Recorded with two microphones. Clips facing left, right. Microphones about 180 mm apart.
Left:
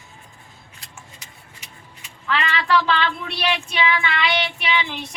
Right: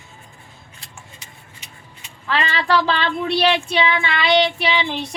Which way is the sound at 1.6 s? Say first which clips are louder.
Even; 30° right (ahead or behind).